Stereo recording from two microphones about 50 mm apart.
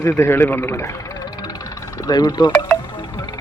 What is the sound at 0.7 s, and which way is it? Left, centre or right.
Speech, left.